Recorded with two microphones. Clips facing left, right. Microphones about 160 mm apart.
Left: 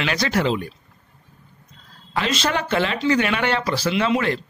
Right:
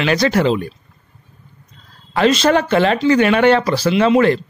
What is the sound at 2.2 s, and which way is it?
Speech, 45° right (ahead or behind).